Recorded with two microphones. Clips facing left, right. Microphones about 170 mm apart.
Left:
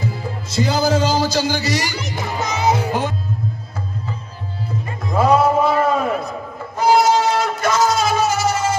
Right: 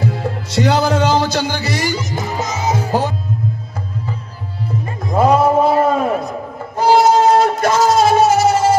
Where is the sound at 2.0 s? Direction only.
65° left (ahead or behind).